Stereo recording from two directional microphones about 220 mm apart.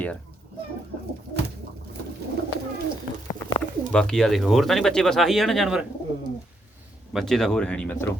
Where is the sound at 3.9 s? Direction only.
Centre (ahead or behind).